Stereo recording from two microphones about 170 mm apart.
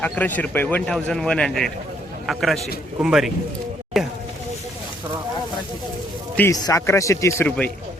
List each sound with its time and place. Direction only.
0.0 s a man's voice: 10° left (ahead or behind)
3.9 s a sound: centre (ahead or behind)
6.3 s a man's voice: 15° left (ahead or behind)